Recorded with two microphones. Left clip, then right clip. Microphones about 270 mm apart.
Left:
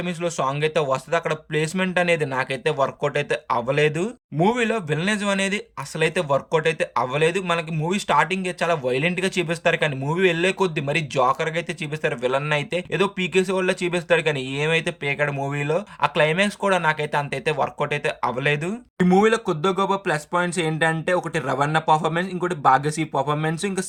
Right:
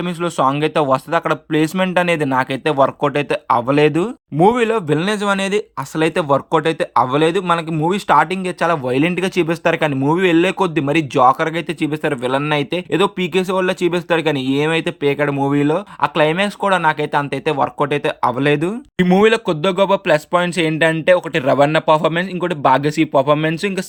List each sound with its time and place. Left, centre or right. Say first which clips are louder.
0.0 s speech: right 7 dB; centre